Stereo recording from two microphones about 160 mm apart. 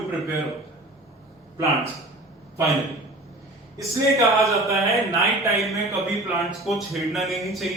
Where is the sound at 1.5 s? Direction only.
20° right (ahead or behind).